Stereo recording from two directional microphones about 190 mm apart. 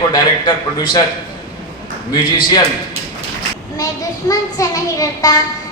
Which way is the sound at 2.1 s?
25° left (ahead or behind).